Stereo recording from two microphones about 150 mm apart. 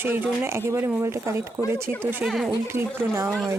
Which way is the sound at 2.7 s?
15° right (ahead or behind).